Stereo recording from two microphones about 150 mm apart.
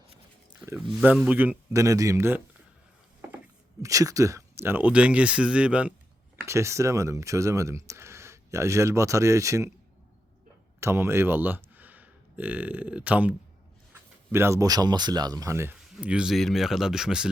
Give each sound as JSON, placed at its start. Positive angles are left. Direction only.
{"t": 0.9, "sound": "speech", "side_deg": -5}
{"t": 3.8, "sound": "speech", "side_deg": -20}
{"t": 6.3, "sound": "speech", "side_deg": -20}
{"t": 10.8, "sound": "speech", "side_deg": -15}
{"t": 14.3, "sound": "speech", "side_deg": -20}